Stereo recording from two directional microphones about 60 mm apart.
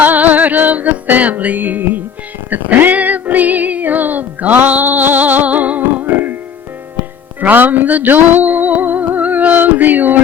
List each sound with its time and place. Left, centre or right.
0.0 s music: right
7.4 s music: right